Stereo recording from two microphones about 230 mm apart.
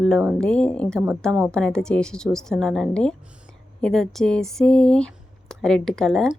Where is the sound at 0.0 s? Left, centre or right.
Centre.